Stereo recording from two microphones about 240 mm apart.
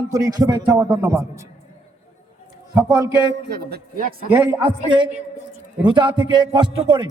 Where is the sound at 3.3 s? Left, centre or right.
Right.